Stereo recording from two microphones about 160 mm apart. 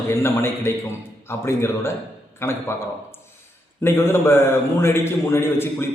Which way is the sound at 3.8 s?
15° left (ahead or behind).